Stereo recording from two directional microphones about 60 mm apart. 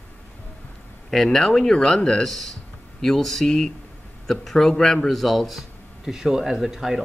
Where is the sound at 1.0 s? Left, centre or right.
Centre.